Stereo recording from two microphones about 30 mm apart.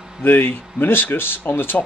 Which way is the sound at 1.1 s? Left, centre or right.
Left.